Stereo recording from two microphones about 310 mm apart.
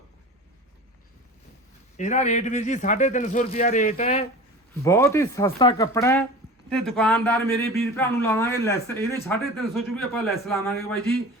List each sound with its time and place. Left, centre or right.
2.0 s speech: left
4.8 s speech: centre